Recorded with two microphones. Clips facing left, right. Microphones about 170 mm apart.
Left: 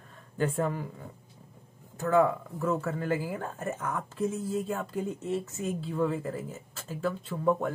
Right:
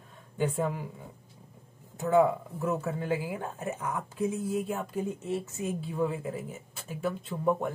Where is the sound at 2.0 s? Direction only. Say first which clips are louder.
Right 1 dB; 20° right (ahead or behind).